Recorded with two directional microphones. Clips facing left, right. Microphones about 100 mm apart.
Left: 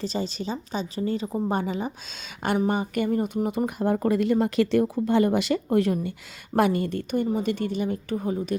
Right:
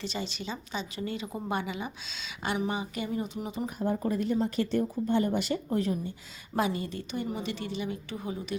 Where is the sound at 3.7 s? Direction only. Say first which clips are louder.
Left 6 dB; 75° left (ahead or behind).